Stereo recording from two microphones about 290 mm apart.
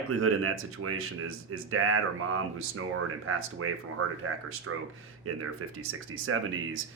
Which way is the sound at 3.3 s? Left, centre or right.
Right.